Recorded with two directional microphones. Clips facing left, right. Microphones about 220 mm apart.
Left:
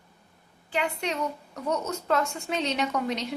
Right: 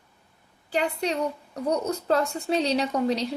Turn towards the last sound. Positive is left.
turn(degrees=-35)  # may be behind; listen again after turning